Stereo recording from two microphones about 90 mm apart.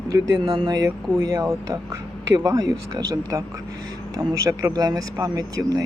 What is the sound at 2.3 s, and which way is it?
Speech, 45° right (ahead or behind).